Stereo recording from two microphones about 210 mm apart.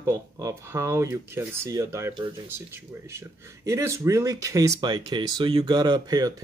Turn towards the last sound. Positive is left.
turn(degrees=-20)  # may be behind; listen again after turning